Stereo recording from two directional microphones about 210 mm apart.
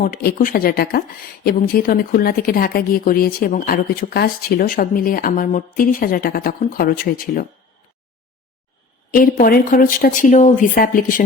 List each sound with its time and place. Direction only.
0.0 s speech: 45° left (ahead or behind)
9.1 s speech: 40° left (ahead or behind)